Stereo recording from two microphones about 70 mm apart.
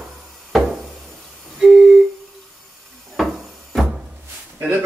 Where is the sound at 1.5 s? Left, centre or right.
Centre.